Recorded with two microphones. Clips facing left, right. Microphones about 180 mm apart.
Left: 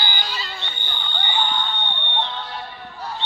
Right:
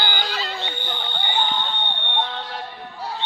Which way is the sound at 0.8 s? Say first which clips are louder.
Right 4 dB; 90° right.